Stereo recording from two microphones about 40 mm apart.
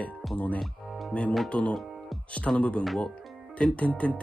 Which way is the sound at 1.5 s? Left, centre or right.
Left.